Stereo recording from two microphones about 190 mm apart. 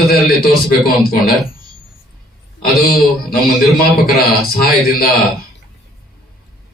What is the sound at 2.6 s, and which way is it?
A man's voice, 50° left (ahead or behind).